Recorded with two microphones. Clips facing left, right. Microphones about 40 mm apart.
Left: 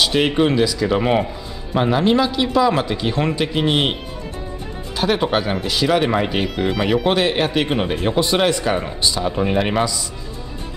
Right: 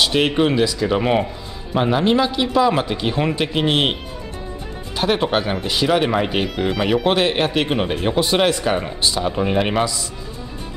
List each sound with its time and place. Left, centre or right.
0.0 s a man's voice: centre
4.9 s speech: centre